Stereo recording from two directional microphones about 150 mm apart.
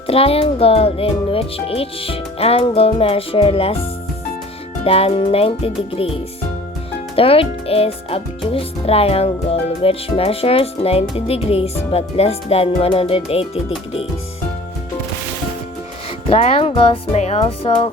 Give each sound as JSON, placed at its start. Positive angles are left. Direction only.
{"t": 0.1, "sound": "a child's voice", "side_deg": 40}
{"t": 4.8, "sound": "a child's voice", "side_deg": 40}
{"t": 7.2, "sound": "a child's voice", "side_deg": 40}
{"t": 16.3, "sound": "a child's voice", "side_deg": 40}